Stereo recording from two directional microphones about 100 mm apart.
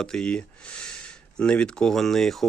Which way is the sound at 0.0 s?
10° left (ahead or behind).